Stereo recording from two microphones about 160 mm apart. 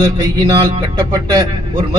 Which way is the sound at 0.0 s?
25° right (ahead or behind).